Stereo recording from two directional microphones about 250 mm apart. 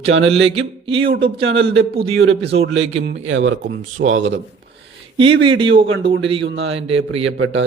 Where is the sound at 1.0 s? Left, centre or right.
Right.